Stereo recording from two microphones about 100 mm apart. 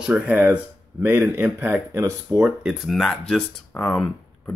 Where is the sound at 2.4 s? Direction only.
5° right (ahead or behind).